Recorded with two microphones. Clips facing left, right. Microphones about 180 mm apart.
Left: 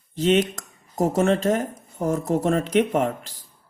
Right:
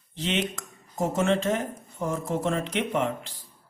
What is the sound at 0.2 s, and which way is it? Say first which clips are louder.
Speech: left 9 dB; 40° left (ahead or behind).